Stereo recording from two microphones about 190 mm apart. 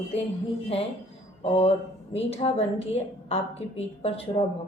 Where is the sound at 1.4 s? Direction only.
30° left (ahead or behind).